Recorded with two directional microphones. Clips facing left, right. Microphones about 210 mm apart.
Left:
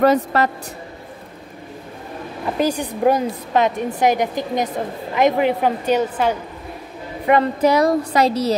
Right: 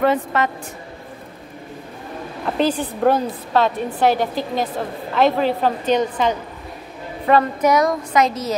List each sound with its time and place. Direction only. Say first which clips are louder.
0.0 s speech: left 3 dB; 40° left (ahead or behind)
2.5 s a woman's voice: right 1 dB; 10° left (ahead or behind)
7.6 s speech: left 2 dB; 30° left (ahead or behind)